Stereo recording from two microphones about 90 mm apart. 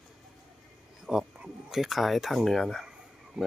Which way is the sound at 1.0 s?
5° right (ahead or behind).